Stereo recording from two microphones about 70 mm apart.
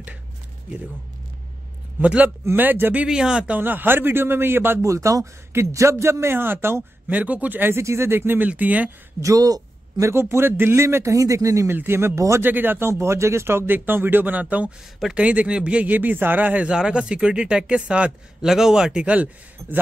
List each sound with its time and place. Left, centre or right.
2.0 s speech: right
3.1 s a man's voice: centre
3.4 s speech: right
4.8 s a man's voice: right
7.1 s speech: right
7.7 s speech: right
8.5 s speech: right
9.2 s a man's voice: right
11.7 s speech: right
12.9 s speech: right
16.7 s a man's voice: centre
19.6 s a man's voice: right